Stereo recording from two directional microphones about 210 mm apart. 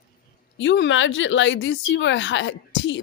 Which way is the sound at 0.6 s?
60° left (ahead or behind).